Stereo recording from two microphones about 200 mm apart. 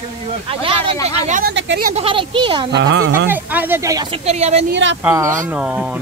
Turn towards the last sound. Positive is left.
turn(degrees=-5)  # may be behind; listen again after turning